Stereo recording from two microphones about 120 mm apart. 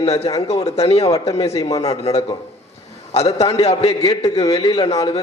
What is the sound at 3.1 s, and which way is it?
Speech, 65° left (ahead or behind).